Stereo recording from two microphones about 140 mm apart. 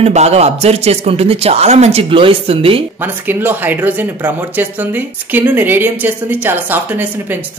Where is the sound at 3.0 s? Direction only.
15° right (ahead or behind).